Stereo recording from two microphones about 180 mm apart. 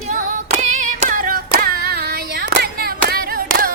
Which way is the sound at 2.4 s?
60° right (ahead or behind).